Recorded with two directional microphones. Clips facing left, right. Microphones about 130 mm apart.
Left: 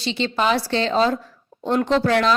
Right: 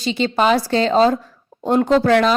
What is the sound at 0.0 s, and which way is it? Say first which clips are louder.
A woman's voice: right 4 dB; 45° right (ahead or behind).